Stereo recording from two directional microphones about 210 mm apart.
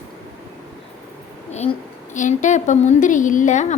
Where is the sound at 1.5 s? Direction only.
30° left (ahead or behind).